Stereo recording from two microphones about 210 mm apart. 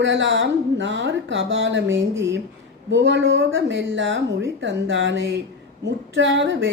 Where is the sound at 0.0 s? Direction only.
60° right (ahead or behind).